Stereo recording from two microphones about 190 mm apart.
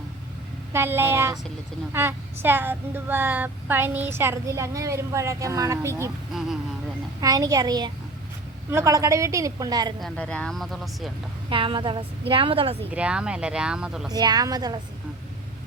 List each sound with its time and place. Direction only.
0.7 s speech: 10° right (ahead or behind)
7.2 s a woman's voice: 20° right (ahead or behind)
10.0 s speech: 5° left (ahead or behind)
11.4 s a woman's voice: 25° right (ahead or behind)
12.9 s speech: 5° right (ahead or behind)
14.1 s a woman's voice: 20° right (ahead or behind)